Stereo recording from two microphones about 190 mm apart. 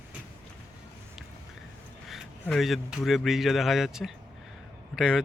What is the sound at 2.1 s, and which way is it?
Speech, centre (ahead or behind).